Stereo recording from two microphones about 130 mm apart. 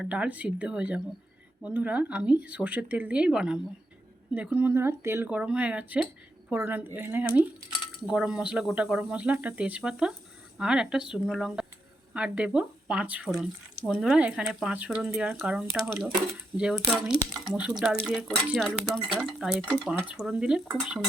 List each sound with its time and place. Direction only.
0.0 s speech: 10° right (ahead or behind)